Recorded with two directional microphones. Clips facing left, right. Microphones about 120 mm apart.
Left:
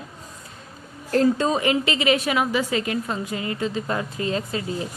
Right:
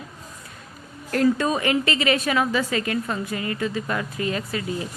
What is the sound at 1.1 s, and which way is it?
A woman's voice, 25° left (ahead or behind).